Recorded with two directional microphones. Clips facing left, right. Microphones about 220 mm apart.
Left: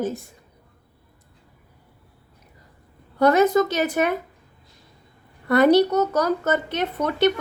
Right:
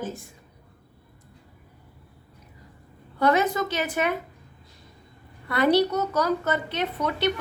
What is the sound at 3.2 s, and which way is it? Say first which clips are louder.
Speech: left 6 dB; 45° left (ahead or behind).